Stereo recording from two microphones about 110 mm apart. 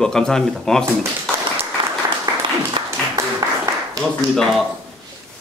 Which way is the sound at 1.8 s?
50° right (ahead or behind).